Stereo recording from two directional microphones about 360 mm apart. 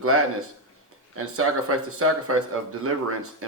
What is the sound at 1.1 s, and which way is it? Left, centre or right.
Speech, right.